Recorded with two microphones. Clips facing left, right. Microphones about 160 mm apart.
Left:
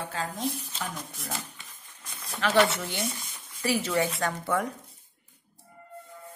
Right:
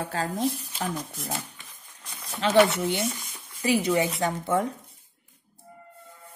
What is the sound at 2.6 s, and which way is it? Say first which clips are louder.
A woman's voice: right 4 dB; 20° right (ahead or behind).